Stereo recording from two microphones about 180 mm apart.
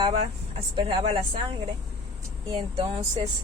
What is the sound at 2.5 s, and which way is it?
Speech, 30° right (ahead or behind).